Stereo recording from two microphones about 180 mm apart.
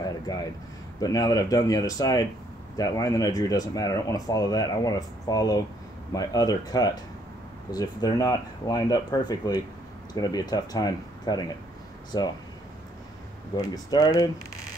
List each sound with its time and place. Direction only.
0.0 s a sound: 20° left (ahead or behind)
1.0 s speech: 20° left (ahead or behind)
13.6 s speech: 20° left (ahead or behind)